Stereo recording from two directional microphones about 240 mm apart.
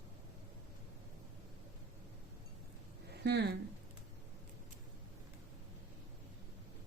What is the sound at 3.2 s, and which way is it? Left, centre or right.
Speech, right.